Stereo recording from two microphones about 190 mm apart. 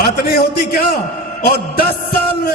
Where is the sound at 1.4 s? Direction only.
55° left (ahead or behind).